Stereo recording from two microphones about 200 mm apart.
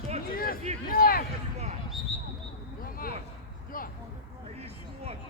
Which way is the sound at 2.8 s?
45° left (ahead or behind).